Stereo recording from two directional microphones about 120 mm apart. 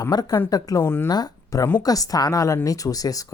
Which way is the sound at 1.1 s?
30° left (ahead or behind).